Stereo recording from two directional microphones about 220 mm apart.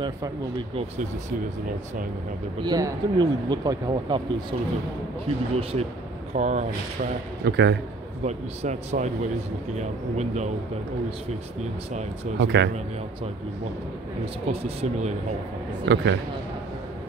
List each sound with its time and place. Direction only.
2.6 s speech: 20° right (ahead or behind)
5.6 s a man's voice: 25° right (ahead or behind)
7.4 s a man's voice: 50° right (ahead or behind)
8.3 s a man's voice: 30° right (ahead or behind)
12.4 s a man's voice: 50° right (ahead or behind)
14.5 s speech: 25° right (ahead or behind)
15.8 s a man's voice: 50° right (ahead or behind)